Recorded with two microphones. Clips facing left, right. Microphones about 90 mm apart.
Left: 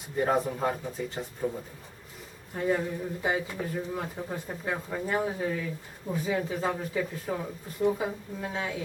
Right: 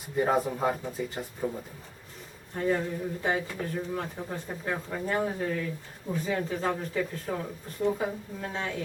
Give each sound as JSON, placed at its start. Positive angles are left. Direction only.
{"t": 0.2, "sound": "speech", "side_deg": -5}